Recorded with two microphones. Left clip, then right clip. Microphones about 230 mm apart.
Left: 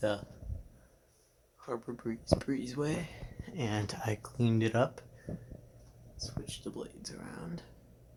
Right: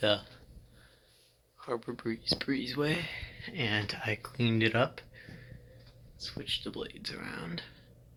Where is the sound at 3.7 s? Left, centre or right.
Centre.